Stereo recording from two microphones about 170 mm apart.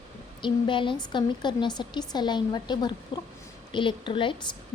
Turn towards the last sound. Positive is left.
turn(degrees=30)  # may be behind; listen again after turning